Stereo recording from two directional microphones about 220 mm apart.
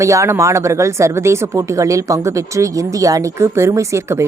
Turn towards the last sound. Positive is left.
turn(degrees=-15)  # may be behind; listen again after turning